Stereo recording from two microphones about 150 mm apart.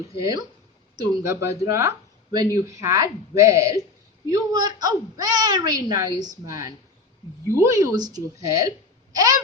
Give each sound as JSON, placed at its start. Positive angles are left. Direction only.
{"t": 0.2, "sound": "a woman's voice", "side_deg": -25}